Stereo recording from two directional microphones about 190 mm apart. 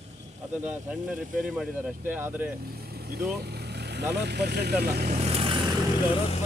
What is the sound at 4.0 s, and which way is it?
Speech, 60° right (ahead or behind).